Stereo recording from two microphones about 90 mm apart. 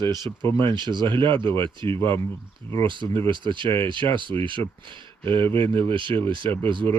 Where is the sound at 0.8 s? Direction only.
60° right (ahead or behind).